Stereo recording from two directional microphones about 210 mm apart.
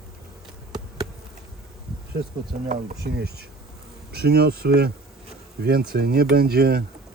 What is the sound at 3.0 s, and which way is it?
Speech, 50° right (ahead or behind).